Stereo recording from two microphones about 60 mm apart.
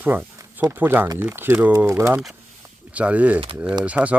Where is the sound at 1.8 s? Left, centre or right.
Right.